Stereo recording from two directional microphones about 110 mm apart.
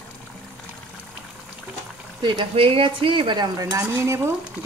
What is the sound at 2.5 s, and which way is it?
A woman's voice, 55° right (ahead or behind).